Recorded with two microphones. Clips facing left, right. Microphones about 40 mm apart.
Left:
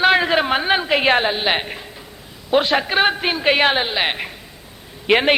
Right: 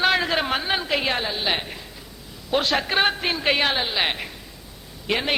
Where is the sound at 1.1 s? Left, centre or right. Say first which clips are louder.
Left 7 dB; left.